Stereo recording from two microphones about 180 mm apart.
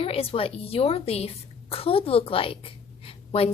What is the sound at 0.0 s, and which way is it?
A woman's voice, 30° left (ahead or behind).